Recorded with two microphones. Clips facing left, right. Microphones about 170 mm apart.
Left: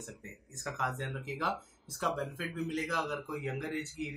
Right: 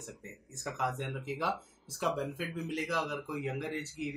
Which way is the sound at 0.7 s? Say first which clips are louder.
Right 2 dB; 10° right (ahead or behind).